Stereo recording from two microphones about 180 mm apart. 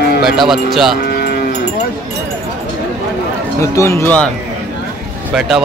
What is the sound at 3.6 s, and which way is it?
Speech, 15° left (ahead or behind).